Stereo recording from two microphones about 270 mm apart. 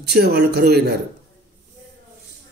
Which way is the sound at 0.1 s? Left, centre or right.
Right.